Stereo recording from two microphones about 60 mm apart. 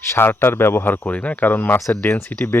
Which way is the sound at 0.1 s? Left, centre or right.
Left.